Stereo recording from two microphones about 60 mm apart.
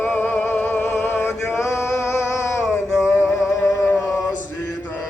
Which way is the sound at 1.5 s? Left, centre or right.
Left.